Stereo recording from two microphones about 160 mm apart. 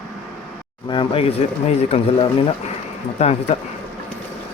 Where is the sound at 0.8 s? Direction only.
35° left (ahead or behind).